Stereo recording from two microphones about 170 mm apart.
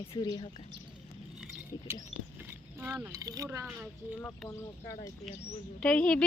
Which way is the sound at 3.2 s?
20° right (ahead or behind).